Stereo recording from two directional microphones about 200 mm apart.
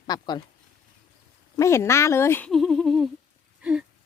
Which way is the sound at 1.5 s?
15° left (ahead or behind).